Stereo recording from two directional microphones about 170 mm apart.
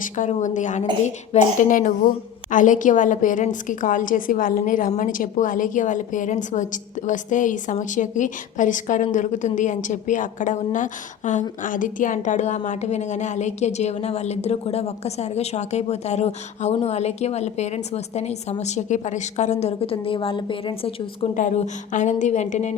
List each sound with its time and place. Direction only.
0.2 s a woman's voice: 45° left (ahead or behind)
21.3 s a woman's voice: 45° left (ahead or behind)